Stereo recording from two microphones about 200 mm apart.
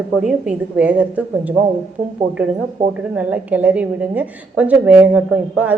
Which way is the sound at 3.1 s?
10° right (ahead or behind).